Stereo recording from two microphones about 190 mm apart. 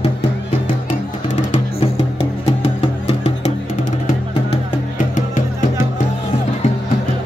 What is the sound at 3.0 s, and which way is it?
Music, 30° left (ahead or behind).